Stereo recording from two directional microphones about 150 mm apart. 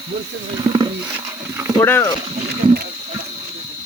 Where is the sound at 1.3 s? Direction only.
20° right (ahead or behind).